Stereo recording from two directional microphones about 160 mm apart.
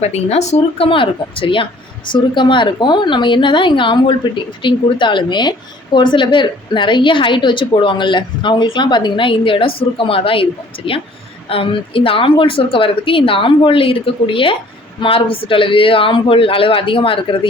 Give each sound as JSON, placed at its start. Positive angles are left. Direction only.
{"t": 0.0, "sound": "a woman's voice", "side_deg": 40}